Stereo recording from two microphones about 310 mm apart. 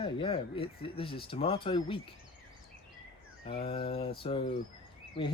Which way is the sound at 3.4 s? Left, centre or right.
Centre.